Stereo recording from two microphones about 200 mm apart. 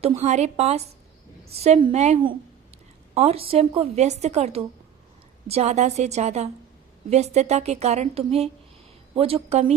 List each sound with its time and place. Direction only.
0.0 s a woman's voice: 30° right (ahead or behind)